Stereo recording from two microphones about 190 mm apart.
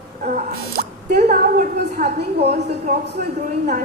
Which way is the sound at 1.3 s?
50° right (ahead or behind).